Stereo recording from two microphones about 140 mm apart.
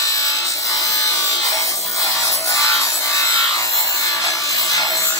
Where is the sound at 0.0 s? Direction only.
25° left (ahead or behind).